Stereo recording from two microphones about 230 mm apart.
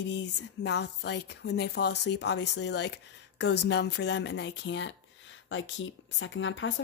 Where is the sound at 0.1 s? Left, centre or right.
Left.